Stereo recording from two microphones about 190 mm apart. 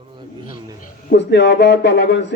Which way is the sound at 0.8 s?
60° left (ahead or behind).